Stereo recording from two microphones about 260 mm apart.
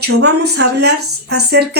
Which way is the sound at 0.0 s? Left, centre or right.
Right.